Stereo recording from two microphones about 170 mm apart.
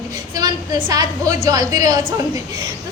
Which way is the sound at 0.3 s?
20° right (ahead or behind).